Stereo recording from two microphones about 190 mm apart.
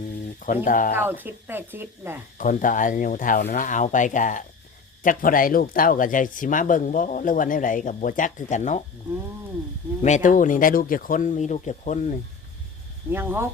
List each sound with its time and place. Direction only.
0.3 s speech: 45° left (ahead or behind)
0.9 s speech: 10° right (ahead or behind)
2.4 s speech: 45° left (ahead or behind)
10.2 s speech: 45° left (ahead or behind)
13.1 s speech: 10° right (ahead or behind)